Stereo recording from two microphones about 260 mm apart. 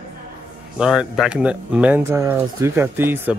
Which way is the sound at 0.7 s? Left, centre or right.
Centre.